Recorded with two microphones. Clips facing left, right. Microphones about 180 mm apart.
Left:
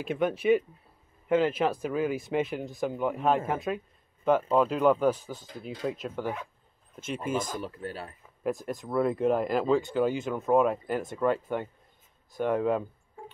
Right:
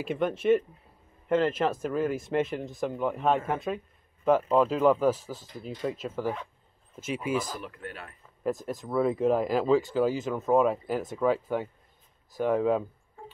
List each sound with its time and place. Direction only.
0.0 s speech: centre (ahead or behind)
7.6 s speech: 30° left (ahead or behind)
8.2 s speech: centre (ahead or behind)